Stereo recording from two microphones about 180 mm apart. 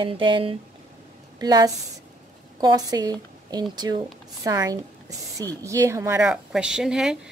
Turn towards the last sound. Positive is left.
turn(degrees=-5)  # may be behind; listen again after turning